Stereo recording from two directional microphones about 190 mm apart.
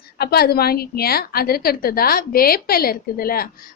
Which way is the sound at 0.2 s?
55° left (ahead or behind).